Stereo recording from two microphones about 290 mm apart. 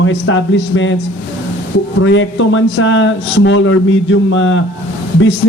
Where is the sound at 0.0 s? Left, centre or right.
Left.